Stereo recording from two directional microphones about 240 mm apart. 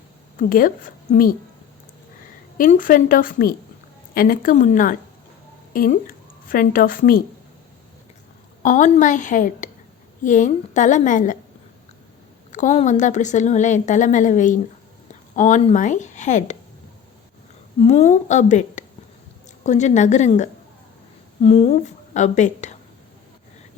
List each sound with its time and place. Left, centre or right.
0.3 s a woman's voice: left
2.6 s a woman's voice: left
8.6 s a woman's voice: left
12.5 s a woman's voice: left
17.8 s a woman's voice: left